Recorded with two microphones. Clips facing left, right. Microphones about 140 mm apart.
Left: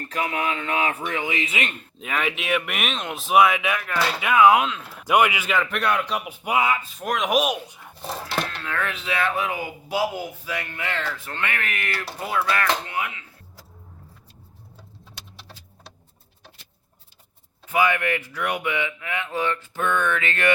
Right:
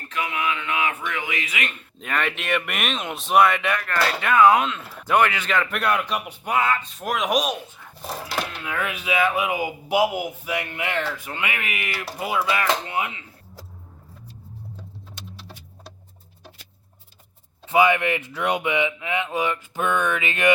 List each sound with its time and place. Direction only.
0.1 s speech: 40° left (ahead or behind)
2.0 s speech: 5° left (ahead or behind)
5.0 s speech: 10° left (ahead or behind)
8.3 s speech: 10° right (ahead or behind)
12.9 s speech: 25° right (ahead or behind)
17.7 s speech: 20° right (ahead or behind)